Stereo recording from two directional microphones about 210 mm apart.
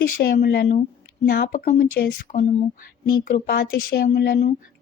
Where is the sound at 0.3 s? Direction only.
45° left (ahead or behind).